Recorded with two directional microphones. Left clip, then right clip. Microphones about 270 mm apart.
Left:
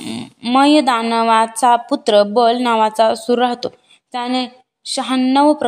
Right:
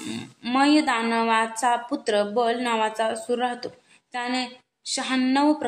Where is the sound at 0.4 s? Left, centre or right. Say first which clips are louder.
Left 8 dB; left.